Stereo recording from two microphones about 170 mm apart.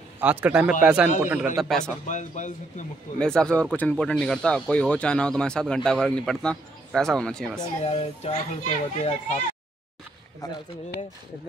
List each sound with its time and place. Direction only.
0.2 s speech: 10° right (ahead or behind)
2.0 s speech: 45° left (ahead or behind)
3.2 s speech: 5° left (ahead or behind)
7.8 s a child's voice: 35° left (ahead or behind)